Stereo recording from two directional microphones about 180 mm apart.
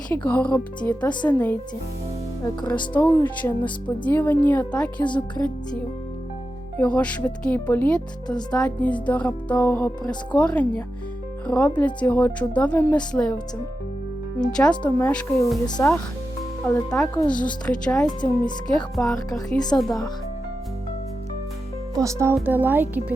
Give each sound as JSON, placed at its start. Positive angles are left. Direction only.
{"t": 0.3, "sound": "speech", "side_deg": 10}
{"t": 2.6, "sound": "speech", "side_deg": 10}
{"t": 6.7, "sound": "speech", "side_deg": 5}
{"t": 14.5, "sound": "speech", "side_deg": 5}
{"t": 16.6, "sound": "speech", "side_deg": 10}
{"t": 18.0, "sound": "speech", "side_deg": 25}
{"t": 18.7, "sound": "speech", "side_deg": 5}
{"t": 21.9, "sound": "speech", "side_deg": -15}